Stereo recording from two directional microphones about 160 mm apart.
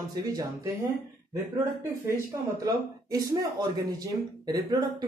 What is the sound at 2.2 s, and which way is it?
Speech, 20° right (ahead or behind).